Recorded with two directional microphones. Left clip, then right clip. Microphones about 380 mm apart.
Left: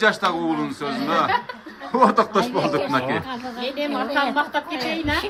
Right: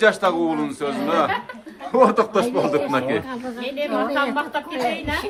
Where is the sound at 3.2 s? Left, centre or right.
Left.